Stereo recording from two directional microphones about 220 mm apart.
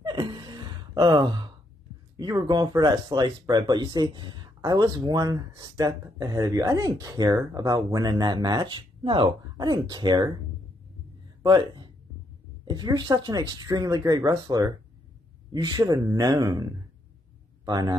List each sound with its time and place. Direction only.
0.0 s gasp: 20° right (ahead or behind)
2.1 s speech: 20° right (ahead or behind)
11.4 s speech: 20° right (ahead or behind)